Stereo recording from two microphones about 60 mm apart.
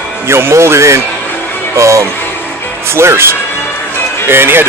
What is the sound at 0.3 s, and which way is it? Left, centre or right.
Speech, right.